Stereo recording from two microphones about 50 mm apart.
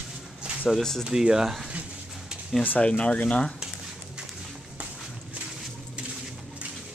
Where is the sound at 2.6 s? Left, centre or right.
Left.